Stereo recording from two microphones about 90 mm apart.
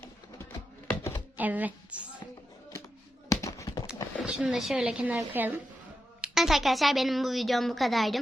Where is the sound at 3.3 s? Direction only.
35° left (ahead or behind).